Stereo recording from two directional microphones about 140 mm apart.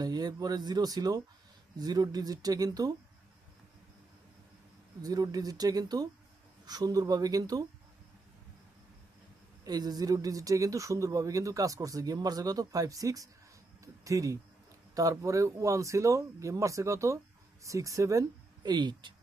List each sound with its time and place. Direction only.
0.0 s speech: 30° right (ahead or behind)
5.0 s speech: 25° right (ahead or behind)
9.6 s speech: 30° right (ahead or behind)